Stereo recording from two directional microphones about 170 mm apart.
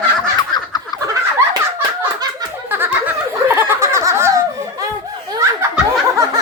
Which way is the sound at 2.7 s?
10° right (ahead or behind).